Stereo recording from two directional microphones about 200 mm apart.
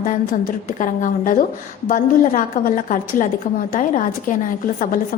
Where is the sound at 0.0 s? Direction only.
45° left (ahead or behind).